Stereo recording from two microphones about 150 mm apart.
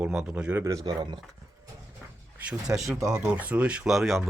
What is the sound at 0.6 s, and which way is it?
Speech, 25° right (ahead or behind).